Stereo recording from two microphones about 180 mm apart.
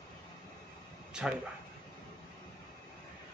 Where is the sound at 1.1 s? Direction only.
5° right (ahead or behind).